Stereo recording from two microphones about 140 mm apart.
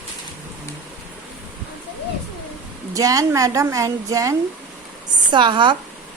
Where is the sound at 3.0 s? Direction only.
25° right (ahead or behind).